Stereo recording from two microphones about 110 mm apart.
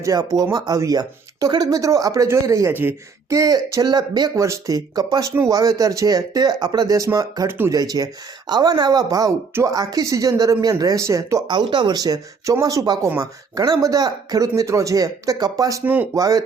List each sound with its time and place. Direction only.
0.0 s speech: 30° right (ahead or behind)
4.4 s speech: 30° right (ahead or behind)
11.5 s speech: 45° right (ahead or behind)
15.8 s speech: 15° right (ahead or behind)
16.1 s speech: 30° right (ahead or behind)